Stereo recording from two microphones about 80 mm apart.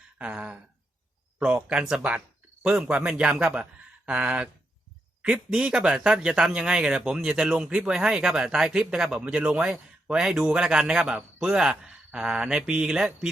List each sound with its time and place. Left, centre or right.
0.2 s speech: centre
1.6 s speech: centre